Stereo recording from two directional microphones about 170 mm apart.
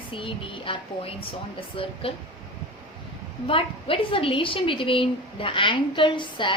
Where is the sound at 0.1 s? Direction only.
30° left (ahead or behind).